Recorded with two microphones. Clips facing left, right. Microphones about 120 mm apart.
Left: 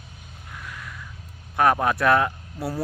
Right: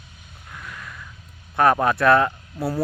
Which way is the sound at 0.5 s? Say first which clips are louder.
Right 1 dB; 10° left (ahead or behind).